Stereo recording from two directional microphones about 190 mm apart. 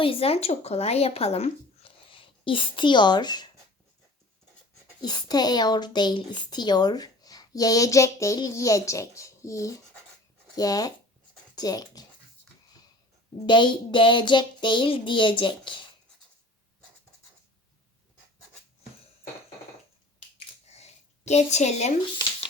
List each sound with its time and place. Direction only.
0.0 s speech: 30° left (ahead or behind)
5.0 s a woman's voice: 20° left (ahead or behind)
13.4 s a woman's voice: 25° left (ahead or behind)
20.7 s a sound: 35° left (ahead or behind)